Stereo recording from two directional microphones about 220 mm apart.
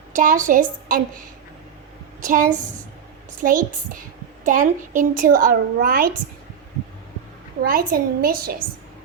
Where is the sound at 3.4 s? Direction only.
40° right (ahead or behind).